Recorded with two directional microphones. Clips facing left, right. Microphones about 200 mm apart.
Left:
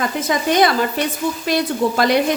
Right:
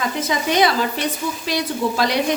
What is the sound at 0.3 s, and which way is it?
Speech, 50° left (ahead or behind).